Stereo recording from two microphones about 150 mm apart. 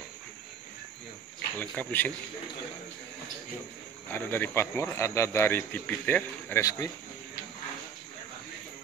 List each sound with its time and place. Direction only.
1.6 s speech: 10° left (ahead or behind)
4.1 s speech: 15° left (ahead or behind)